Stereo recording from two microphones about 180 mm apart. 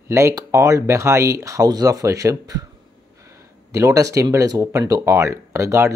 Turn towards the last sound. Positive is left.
turn(degrees=-15)  # may be behind; listen again after turning